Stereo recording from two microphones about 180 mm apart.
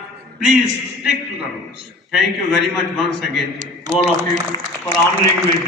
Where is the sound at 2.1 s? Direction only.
Centre (ahead or behind).